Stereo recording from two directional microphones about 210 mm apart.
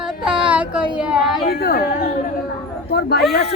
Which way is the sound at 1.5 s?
45° left (ahead or behind).